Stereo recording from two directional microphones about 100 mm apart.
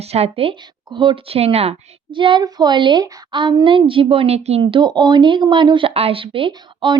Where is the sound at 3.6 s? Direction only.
60° right (ahead or behind); by 4.6 s 90° right.